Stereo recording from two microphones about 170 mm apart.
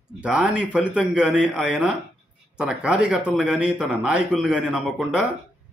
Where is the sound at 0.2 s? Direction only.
5° right (ahead or behind).